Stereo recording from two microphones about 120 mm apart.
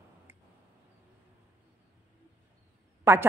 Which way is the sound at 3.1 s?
20° right (ahead or behind).